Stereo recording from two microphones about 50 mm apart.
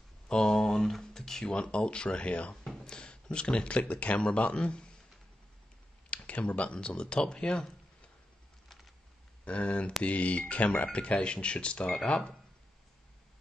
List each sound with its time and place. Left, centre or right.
0.3 s a sound: centre
2.8 s speech: centre
6.0 s speech: left
9.4 s speech: left